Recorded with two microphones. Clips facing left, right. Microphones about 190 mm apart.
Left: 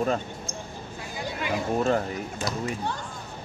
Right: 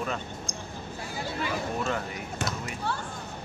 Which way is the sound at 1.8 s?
40° left (ahead or behind).